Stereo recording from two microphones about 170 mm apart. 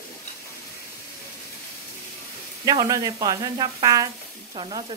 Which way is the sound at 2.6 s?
20° right (ahead or behind).